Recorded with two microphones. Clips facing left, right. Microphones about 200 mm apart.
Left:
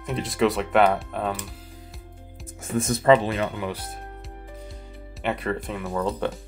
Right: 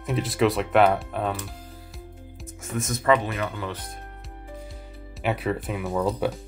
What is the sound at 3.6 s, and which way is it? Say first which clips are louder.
Speech: left 2 dB; 10° left (ahead or behind).